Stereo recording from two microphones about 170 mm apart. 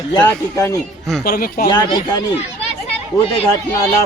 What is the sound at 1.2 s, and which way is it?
Speech, 55° left (ahead or behind).